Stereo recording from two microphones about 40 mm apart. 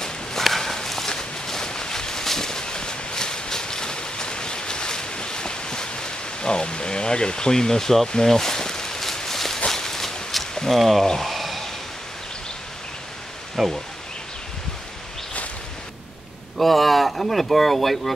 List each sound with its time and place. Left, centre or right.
0.4 s walk: centre
1.1 s a sound: centre
10.8 s speech: centre
11.2 s a sound: centre
13.6 s speech: centre
16.5 s speech: centre